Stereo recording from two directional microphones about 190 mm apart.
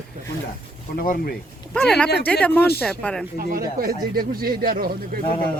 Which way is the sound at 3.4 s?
50° right (ahead or behind).